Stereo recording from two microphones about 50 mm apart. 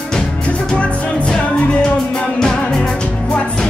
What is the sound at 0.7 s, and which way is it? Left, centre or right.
Music, left.